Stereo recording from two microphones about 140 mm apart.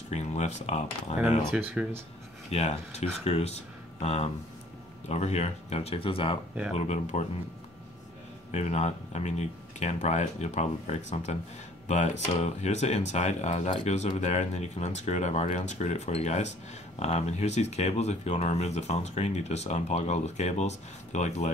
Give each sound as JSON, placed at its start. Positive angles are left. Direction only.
{"t": 0.1, "sound": "speech", "side_deg": 55}
{"t": 1.5, "sound": "speech", "side_deg": -5}
{"t": 2.5, "sound": "speech", "side_deg": 50}
{"t": 6.8, "sound": "speech", "side_deg": 55}
{"t": 8.5, "sound": "speech", "side_deg": 50}